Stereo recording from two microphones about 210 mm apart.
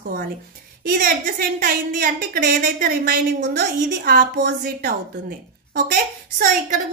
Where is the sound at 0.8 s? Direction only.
40° right (ahead or behind).